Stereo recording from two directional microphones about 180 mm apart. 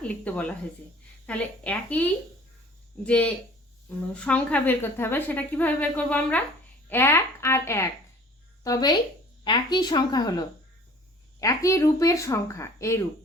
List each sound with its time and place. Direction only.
0.0 s a woman's voice: 10° left (ahead or behind)